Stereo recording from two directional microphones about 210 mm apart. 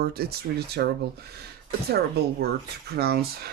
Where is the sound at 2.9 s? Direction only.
50° right (ahead or behind).